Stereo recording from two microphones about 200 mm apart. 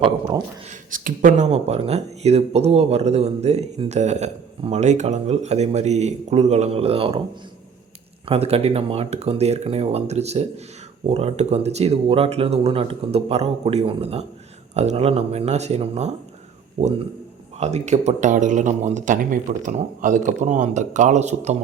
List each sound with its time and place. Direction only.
0.9 s speech: 45° right (ahead or behind)
8.3 s speech: 30° right (ahead or behind)
17.6 s speech: 35° right (ahead or behind)